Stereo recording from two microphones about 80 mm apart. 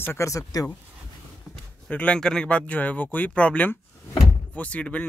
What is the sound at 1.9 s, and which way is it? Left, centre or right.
Speech, centre.